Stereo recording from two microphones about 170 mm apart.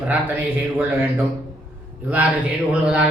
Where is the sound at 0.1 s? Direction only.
10° right (ahead or behind).